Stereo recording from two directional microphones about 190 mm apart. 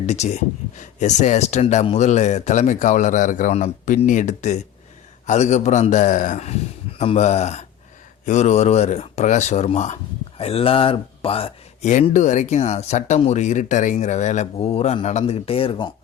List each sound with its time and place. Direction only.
0.0 s speech: 35° left (ahead or behind)